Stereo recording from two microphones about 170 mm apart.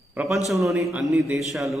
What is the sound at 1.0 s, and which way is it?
Speech, centre (ahead or behind).